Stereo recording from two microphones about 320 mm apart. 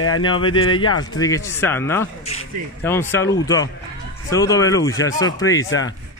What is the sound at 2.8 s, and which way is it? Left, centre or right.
Speech, centre.